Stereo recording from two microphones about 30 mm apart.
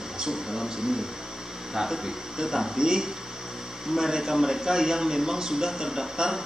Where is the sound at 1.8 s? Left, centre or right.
Centre.